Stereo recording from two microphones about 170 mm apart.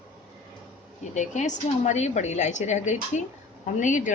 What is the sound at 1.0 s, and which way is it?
A woman's voice, 45° left (ahead or behind).